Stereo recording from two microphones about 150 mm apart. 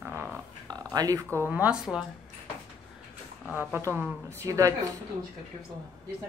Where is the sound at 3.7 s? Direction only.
15° right (ahead or behind).